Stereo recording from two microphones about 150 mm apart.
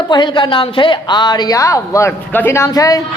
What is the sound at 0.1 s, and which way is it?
A woman's voice, 30° left (ahead or behind).